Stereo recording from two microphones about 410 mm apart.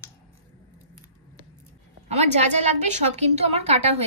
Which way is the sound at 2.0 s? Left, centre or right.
Centre.